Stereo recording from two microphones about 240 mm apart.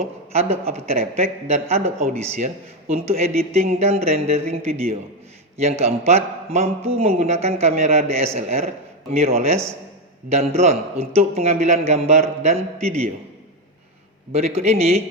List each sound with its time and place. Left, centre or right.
0.0 s a man's voice: right
14.3 s a man's voice: right